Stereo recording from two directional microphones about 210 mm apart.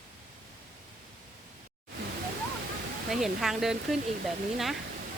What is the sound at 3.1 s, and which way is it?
Speech, centre (ahead or behind).